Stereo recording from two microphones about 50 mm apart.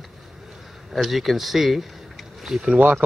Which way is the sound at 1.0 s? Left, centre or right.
Centre.